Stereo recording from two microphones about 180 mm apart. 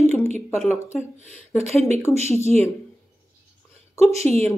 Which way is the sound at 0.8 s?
15° left (ahead or behind).